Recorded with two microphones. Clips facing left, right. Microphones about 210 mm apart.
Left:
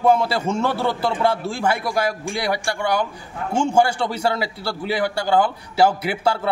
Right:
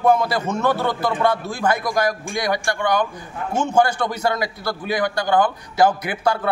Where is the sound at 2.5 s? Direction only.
10° left (ahead or behind).